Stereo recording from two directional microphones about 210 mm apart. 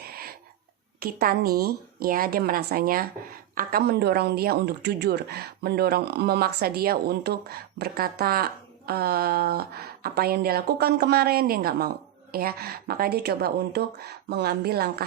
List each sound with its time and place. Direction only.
0.9 s speech: 45° right (ahead or behind)